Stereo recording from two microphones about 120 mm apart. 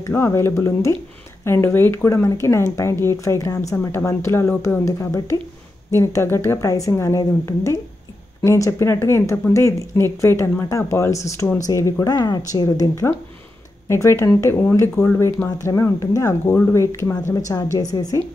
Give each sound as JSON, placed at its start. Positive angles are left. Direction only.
{"t": 0.1, "sound": "a woman's voice", "side_deg": 20}